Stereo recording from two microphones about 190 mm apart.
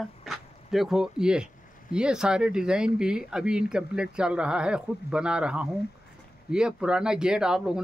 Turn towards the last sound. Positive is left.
turn(degrees=-5)  # may be behind; listen again after turning